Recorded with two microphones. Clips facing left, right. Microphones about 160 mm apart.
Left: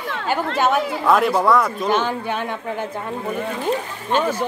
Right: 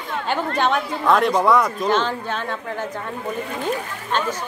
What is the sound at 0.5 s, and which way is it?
Speech, 5° left (ahead or behind).